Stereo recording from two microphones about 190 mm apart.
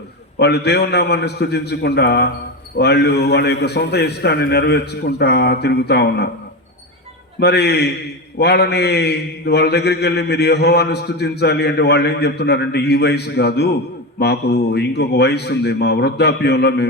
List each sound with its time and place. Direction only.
0.3 s a man's voice: 60° left (ahead or behind)
7.3 s a man's voice: 60° left (ahead or behind)